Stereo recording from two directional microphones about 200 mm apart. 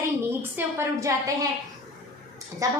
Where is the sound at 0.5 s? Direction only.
15° right (ahead or behind).